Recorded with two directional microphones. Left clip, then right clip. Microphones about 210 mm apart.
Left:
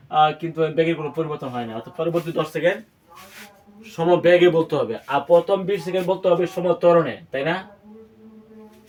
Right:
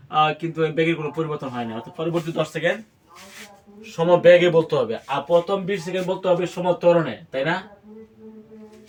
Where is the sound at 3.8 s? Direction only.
10° left (ahead or behind).